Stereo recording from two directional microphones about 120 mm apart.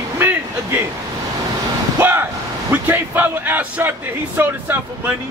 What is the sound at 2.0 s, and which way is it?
Speech, 15° right (ahead or behind).